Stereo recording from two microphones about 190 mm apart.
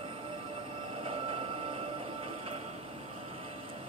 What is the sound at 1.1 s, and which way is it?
Train, 30° right (ahead or behind).